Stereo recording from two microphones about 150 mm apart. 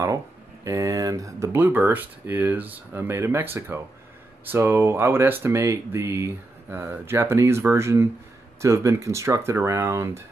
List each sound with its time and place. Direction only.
0.7 s speech: 20° right (ahead or behind)